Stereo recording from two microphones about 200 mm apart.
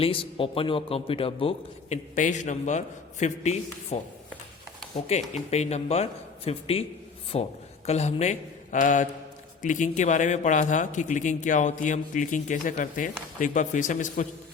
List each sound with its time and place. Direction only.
0.0 s a man's voice: 25° left (ahead or behind)
2.1 s speech: 40° left (ahead or behind)